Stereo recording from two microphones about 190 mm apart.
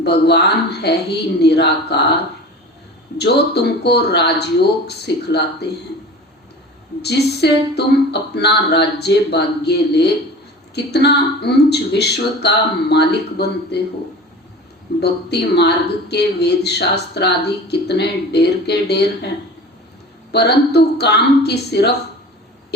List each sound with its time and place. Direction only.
0.0 s a woman's voice: 60° left (ahead or behind)
7.0 s a woman's voice: 60° left (ahead or behind)
15.0 s a woman's voice: 60° left (ahead or behind)
20.3 s a woman's voice: 60° left (ahead or behind)